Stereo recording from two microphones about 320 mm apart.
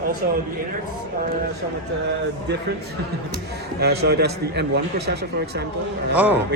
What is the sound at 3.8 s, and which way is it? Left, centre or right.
A man's voice, right.